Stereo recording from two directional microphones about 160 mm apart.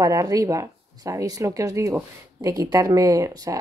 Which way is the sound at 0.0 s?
20° right (ahead or behind).